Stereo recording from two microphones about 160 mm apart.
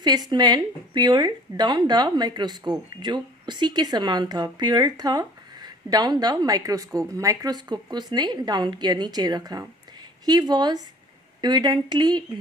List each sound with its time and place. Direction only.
0.0 s speech: 25° right (ahead or behind)